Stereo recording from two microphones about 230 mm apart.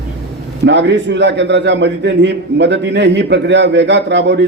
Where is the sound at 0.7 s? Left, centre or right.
Right.